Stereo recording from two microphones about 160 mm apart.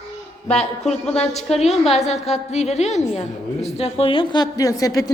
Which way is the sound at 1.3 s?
40° left (ahead or behind).